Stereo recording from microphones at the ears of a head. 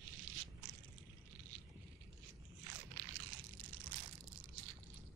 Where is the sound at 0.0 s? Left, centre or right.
Right.